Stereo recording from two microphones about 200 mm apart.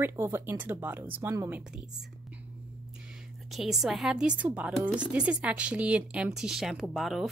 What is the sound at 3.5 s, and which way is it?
Speech, centre (ahead or behind).